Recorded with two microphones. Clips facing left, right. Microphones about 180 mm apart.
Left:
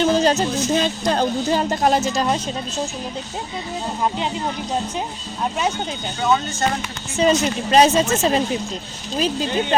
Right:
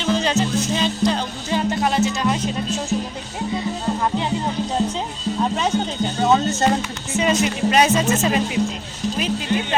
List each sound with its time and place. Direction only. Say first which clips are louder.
0.0 s music: left 3 dB; 40° left (ahead or behind)
6.2 s speech: right 2 dB; 40° right (ahead or behind)
7.2 s speech: left 2 dB; 35° left (ahead or behind)